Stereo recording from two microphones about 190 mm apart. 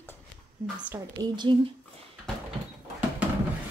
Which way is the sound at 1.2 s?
25° right (ahead or behind).